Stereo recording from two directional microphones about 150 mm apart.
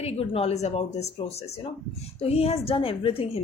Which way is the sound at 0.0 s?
40° left (ahead or behind).